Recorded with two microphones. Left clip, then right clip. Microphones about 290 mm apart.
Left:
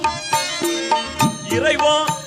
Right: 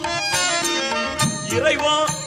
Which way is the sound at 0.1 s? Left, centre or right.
Left.